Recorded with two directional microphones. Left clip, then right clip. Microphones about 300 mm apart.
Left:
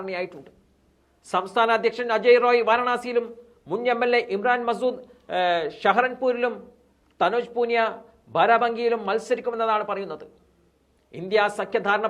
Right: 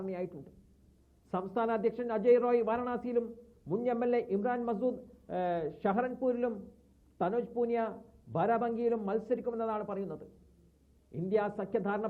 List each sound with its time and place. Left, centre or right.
0.0 s speech: centre